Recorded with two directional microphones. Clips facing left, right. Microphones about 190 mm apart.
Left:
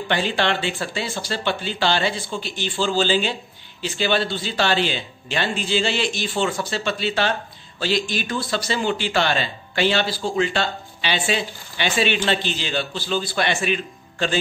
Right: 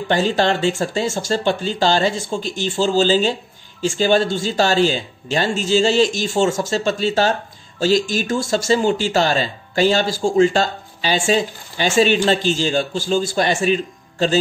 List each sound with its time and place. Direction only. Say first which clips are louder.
0.1 s speech: right 5 dB; 40° right (ahead or behind)